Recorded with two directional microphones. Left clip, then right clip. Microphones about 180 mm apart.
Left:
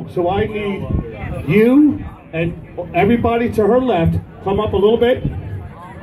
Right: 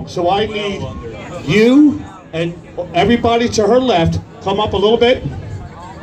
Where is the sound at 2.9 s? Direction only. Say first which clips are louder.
Right 2 dB; 20° right (ahead or behind).